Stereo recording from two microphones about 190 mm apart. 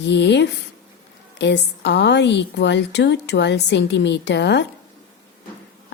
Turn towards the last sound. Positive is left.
turn(degrees=65)  # may be behind; listen again after turning